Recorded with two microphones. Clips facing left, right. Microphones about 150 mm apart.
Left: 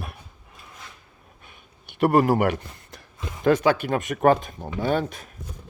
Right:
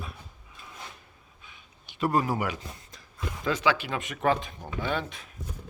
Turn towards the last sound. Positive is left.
turn(degrees=40)  # may be behind; listen again after turning